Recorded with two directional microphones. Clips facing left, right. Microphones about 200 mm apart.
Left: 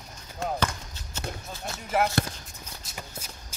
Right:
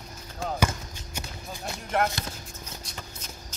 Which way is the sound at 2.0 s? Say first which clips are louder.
Even; 5° left (ahead or behind).